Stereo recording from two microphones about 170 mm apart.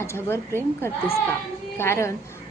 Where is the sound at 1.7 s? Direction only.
15° left (ahead or behind).